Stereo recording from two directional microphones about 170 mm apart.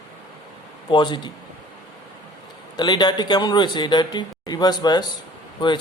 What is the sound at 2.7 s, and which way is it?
A man's voice, 25° left (ahead or behind).